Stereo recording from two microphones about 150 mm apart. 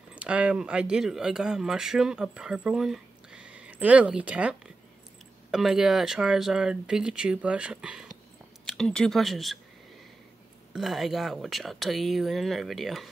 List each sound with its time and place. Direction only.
0.1 s speech: 10° right (ahead or behind)
10.7 s speech: centre (ahead or behind)